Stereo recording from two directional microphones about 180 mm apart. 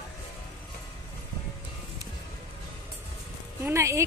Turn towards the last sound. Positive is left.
turn(degrees=-15)  # may be behind; listen again after turning